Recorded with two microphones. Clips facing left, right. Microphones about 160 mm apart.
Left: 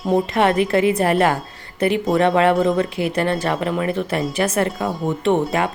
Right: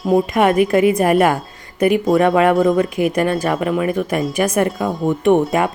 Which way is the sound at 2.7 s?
15° right (ahead or behind).